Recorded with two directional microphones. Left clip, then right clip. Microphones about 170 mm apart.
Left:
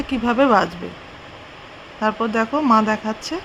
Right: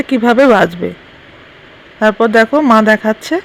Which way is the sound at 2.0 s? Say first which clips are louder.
Right 11 dB; 35° right (ahead or behind).